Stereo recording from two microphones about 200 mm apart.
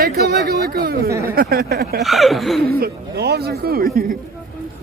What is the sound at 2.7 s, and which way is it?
Speech, 50° right (ahead or behind).